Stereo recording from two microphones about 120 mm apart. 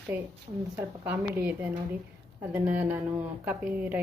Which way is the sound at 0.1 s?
15° right (ahead or behind).